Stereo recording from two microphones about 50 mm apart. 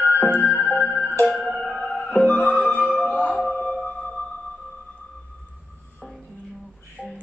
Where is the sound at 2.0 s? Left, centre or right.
Left.